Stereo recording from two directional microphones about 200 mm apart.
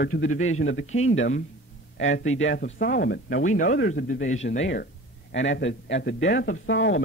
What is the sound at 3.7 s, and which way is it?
Speech, 65° left (ahead or behind).